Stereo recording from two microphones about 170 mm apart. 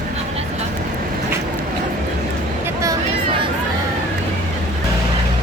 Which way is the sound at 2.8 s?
25° right (ahead or behind).